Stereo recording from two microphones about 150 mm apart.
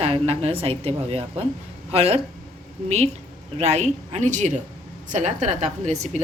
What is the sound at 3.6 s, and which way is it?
A woman's voice, 45° right (ahead or behind).